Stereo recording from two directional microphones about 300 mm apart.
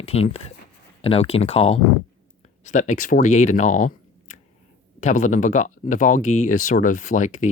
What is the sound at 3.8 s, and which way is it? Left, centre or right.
Computer keyboard, left.